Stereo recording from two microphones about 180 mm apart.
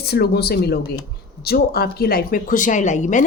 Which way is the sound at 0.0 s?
65° left (ahead or behind).